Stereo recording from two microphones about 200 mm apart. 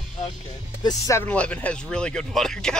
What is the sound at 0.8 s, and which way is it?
Speech, 15° left (ahead or behind).